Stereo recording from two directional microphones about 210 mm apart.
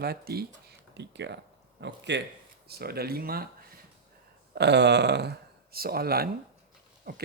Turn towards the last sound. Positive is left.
turn(degrees=-45)  # may be behind; listen again after turning